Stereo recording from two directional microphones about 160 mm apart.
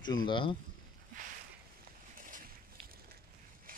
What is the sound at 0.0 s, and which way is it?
Speech, 30° left (ahead or behind).